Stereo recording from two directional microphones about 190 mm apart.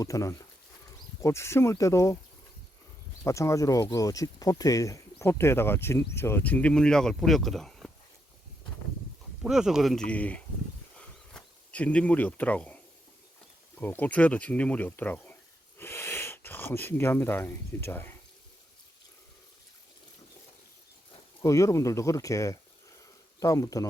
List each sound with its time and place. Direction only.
0.0 s speech: 15° left (ahead or behind)
3.2 s speech: 15° left (ahead or behind)
9.4 s speech: 5° right (ahead or behind)
10.9 s a sound: 5° left (ahead or behind)
13.7 s speech: 10° left (ahead or behind)
21.4 s speech: 15° left (ahead or behind)